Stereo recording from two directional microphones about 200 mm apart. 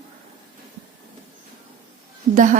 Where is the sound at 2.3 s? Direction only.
40° right (ahead or behind).